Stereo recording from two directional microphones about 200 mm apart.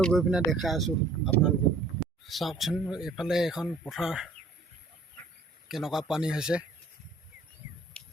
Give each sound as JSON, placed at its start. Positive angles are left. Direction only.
{"t": 0.0, "sound": "speech", "side_deg": 0}
{"t": 5.6, "sound": "speech", "side_deg": 0}
{"t": 7.9, "sound": "a sound", "side_deg": 5}